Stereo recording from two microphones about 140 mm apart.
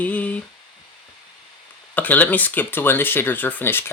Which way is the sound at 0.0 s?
10° left (ahead or behind).